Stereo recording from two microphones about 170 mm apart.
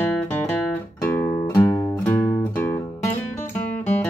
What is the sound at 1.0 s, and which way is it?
Music, 15° left (ahead or behind).